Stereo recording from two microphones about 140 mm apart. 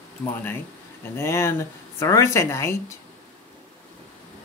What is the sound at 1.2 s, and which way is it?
Speech, 20° left (ahead or behind).